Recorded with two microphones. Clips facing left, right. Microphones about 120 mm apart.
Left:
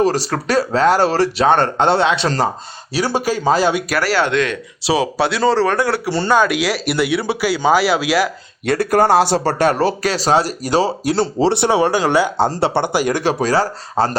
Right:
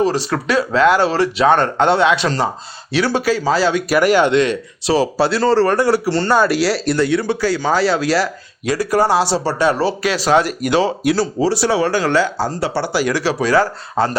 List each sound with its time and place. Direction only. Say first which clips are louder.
0.0 s speech: even; 40° left (ahead or behind)
3.2 s speech: right 2 dB; 45° left (ahead or behind)
3.6 s speech: even; 15° left (ahead or behind)
4.0 s speech: right 5 dB; 15° right (ahead or behind)
4.9 s speech: right 2 dB; centre (ahead or behind)
6.1 s speech: right 1 dB; 10° left (ahead or behind)
6.3 s speech: even; 5° right (ahead or behind)
8.6 s speech: left 2 dB; 60° left (ahead or behind); by 11.1 s 40° left (ahead or behind)
11.6 s speech: left 1 dB; 20° left (ahead or behind)
12.5 s speech: left 3 dB; 25° left (ahead or behind)
13.1 s speech: even; 50° left (ahead or behind)